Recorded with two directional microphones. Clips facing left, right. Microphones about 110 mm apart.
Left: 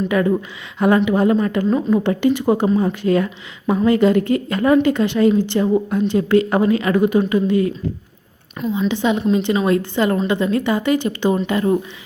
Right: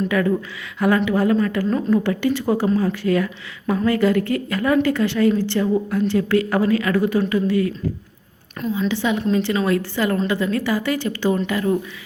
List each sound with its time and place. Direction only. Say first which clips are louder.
0.1 s a woman's voice: left 2 dB; 20° left (ahead or behind)
8.9 s a woman's voice: left 3 dB; 20° left (ahead or behind)